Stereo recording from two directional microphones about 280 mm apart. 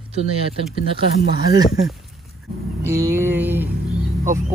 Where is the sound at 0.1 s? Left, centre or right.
Right.